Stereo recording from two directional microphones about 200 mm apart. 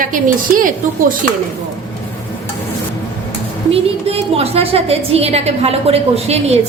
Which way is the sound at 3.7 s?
30° right (ahead or behind).